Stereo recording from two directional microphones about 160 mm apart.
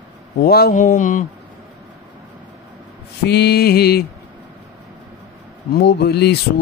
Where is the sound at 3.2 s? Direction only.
90° left.